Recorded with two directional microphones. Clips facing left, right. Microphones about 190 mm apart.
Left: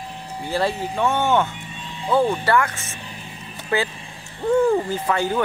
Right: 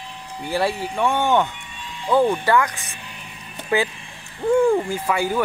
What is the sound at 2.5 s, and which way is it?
Speech, 15° right (ahead or behind).